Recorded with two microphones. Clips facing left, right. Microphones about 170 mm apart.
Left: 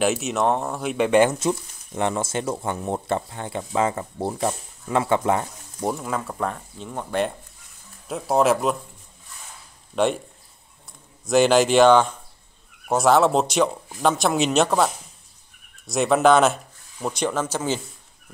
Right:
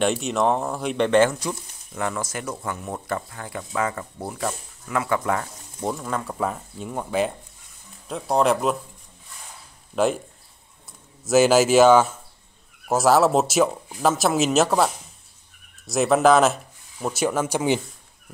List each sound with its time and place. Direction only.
0.0 s speech: 5° left (ahead or behind)
1.4 s speech: 25° left (ahead or behind)
5.8 s speech: 5° left (ahead or behind)
9.9 s speech: centre (ahead or behind)
11.2 s speech: 5° right (ahead or behind)
15.9 s speech: centre (ahead or behind)